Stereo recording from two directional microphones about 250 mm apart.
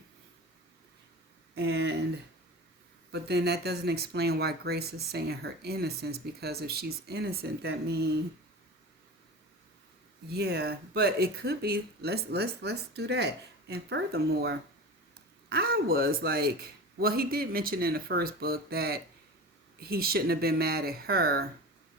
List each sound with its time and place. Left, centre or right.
1.5 s speech: right
3.1 s speech: right
10.2 s speech: right